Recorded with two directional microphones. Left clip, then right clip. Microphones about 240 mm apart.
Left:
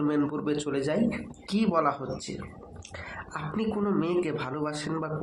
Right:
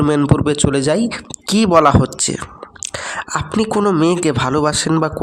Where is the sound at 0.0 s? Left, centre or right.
Right.